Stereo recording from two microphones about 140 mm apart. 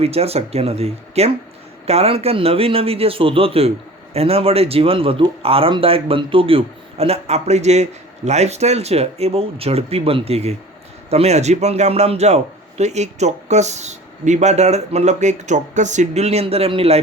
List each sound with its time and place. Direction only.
0.0 s a man's voice: 45° right (ahead or behind)